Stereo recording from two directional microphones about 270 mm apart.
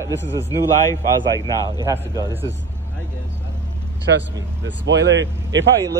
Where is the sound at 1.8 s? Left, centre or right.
Centre.